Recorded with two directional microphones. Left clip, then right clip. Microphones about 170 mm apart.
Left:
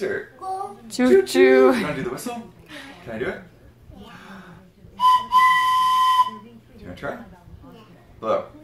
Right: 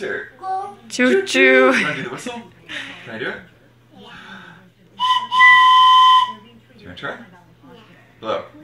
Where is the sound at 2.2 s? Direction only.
15° left (ahead or behind).